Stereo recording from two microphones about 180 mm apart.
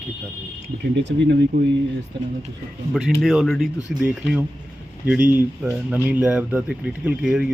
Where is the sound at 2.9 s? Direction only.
Centre (ahead or behind).